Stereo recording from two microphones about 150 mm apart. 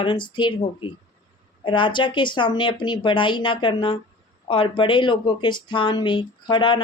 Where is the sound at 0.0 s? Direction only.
30° left (ahead or behind).